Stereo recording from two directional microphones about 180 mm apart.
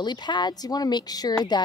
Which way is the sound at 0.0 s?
25° left (ahead or behind).